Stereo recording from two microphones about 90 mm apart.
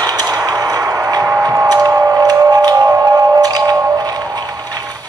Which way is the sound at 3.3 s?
45° right (ahead or behind).